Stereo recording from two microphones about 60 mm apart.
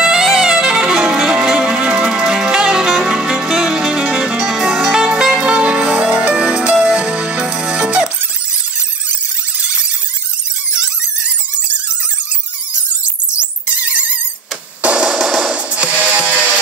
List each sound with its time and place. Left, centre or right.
0.0 s music: centre
13.3 s a sound: right
14.8 s music: centre